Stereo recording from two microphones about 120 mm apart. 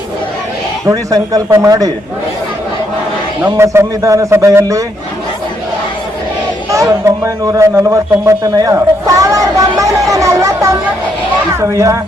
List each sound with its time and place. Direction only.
0.9 s a man's voice: 30° right (ahead or behind)
3.4 s a man's voice: 20° right (ahead or behind)
6.7 s a man's voice: 25° right (ahead or behind)